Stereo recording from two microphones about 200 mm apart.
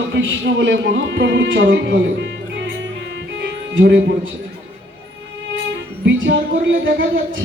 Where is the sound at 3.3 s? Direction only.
60° right (ahead or behind).